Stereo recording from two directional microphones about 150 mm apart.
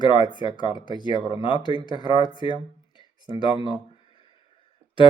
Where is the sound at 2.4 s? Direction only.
30° left (ahead or behind).